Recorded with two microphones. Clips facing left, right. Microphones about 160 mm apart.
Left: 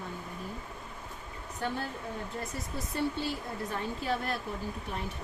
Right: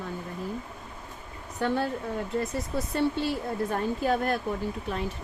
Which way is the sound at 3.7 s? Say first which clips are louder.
Right 6 dB; 50° right (ahead or behind).